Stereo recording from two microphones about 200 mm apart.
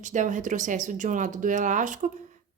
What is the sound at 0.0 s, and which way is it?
Speech, 40° right (ahead or behind).